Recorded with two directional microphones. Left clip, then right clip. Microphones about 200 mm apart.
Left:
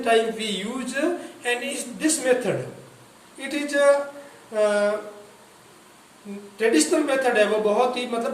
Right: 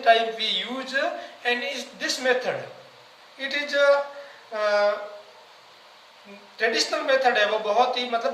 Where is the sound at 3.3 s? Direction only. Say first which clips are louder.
Even; 5° right (ahead or behind).